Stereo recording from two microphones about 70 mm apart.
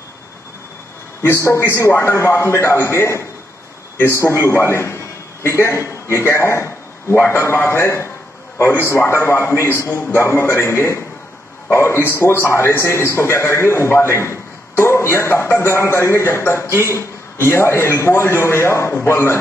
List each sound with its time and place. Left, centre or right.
1.2 s a man's voice: left